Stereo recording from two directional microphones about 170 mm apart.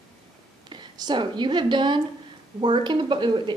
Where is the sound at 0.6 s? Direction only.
25° right (ahead or behind).